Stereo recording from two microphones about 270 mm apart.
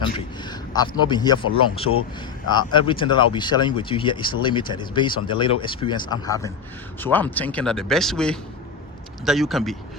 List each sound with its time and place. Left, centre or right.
0.0 s a man's voice: centre
2.5 s speech: centre